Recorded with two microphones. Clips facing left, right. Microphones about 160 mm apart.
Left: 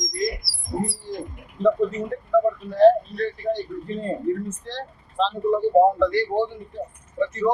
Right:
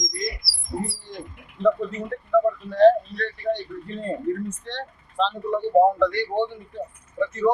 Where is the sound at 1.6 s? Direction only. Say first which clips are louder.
Left 1 dB; 45° left (ahead or behind).